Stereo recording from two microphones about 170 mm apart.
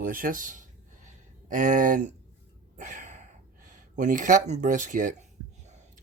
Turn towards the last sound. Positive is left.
turn(degrees=-50)  # may be behind; listen again after turning